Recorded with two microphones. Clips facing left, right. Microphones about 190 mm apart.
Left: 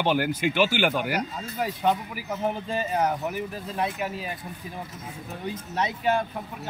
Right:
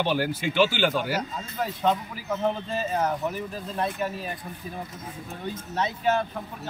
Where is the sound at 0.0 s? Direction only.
15° left (ahead or behind).